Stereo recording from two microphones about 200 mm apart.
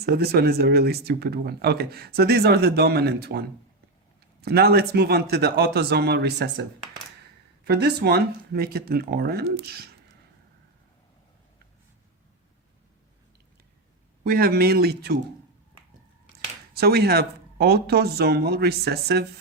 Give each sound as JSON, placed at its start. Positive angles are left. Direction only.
{"t": 0.0, "sound": "speech", "side_deg": -50}
{"t": 7.6, "sound": "speech", "side_deg": -55}
{"t": 14.3, "sound": "speech", "side_deg": -50}
{"t": 16.7, "sound": "speech", "side_deg": -50}